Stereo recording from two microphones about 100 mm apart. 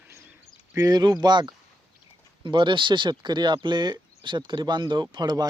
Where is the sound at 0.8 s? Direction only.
40° right (ahead or behind).